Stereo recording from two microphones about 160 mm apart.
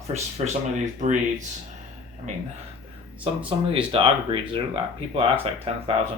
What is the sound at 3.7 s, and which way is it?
Speech, 30° right (ahead or behind).